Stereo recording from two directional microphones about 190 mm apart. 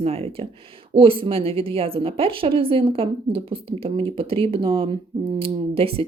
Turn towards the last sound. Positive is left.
turn(degrees=-30)  # may be behind; listen again after turning